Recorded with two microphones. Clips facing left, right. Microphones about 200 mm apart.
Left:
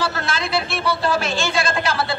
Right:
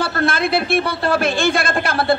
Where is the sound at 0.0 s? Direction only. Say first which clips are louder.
Right 5 dB; 55° right (ahead or behind).